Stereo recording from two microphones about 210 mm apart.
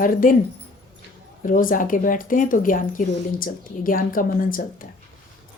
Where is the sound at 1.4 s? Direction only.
40° left (ahead or behind).